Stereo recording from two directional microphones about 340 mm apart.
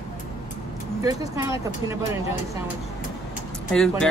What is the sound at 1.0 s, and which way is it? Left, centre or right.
Speech, centre.